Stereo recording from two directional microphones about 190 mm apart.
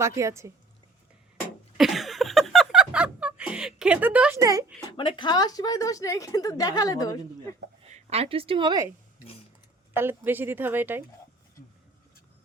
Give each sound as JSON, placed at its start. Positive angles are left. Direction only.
{"t": 0.0, "sound": "speech", "side_deg": -15}
{"t": 1.8, "sound": "a sound", "side_deg": 0}
{"t": 4.9, "sound": "a woman's voice", "side_deg": 25}
{"t": 7.9, "sound": "a woman's voice", "side_deg": -35}
{"t": 9.9, "sound": "speech", "side_deg": -10}